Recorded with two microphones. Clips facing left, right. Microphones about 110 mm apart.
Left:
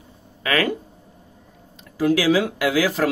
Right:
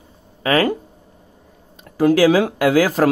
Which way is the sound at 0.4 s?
35° right (ahead or behind).